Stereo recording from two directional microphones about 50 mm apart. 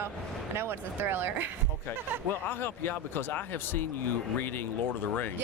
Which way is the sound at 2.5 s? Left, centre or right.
Left.